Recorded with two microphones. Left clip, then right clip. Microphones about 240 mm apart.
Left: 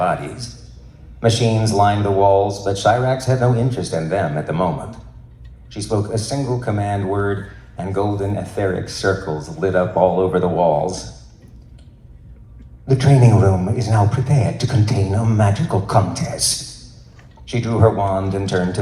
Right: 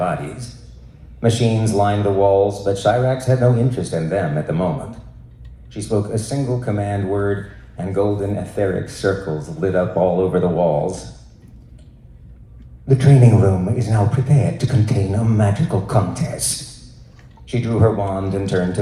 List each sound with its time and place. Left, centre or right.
0.0 s a man's voice: centre
12.9 s a man's voice: centre
17.5 s a man's voice: centre